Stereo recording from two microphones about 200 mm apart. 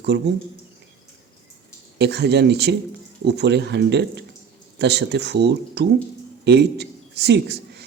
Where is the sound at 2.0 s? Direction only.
55° right (ahead or behind).